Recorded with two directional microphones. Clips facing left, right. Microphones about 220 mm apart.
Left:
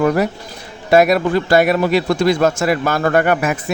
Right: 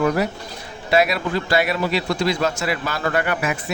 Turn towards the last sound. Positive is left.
turn(degrees=50)  # may be behind; listen again after turning